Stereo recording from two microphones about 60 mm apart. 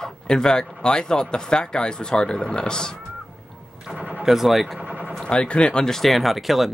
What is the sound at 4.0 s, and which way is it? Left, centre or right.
Gunshot, right.